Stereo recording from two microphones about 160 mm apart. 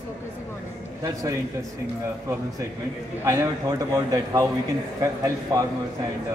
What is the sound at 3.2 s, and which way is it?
A man's voice, 20° right (ahead or behind).